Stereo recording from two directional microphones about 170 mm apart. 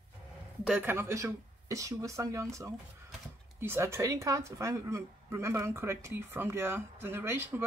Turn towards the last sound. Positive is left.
turn(degrees=-15)  # may be behind; listen again after turning